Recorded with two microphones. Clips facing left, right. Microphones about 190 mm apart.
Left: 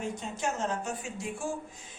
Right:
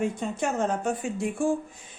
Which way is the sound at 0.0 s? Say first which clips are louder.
Right 6 dB; 55° right (ahead or behind).